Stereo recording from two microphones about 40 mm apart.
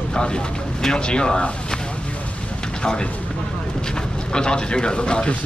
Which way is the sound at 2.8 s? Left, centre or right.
Left.